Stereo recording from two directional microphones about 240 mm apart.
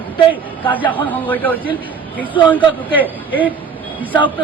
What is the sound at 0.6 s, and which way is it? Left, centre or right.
Speech, centre.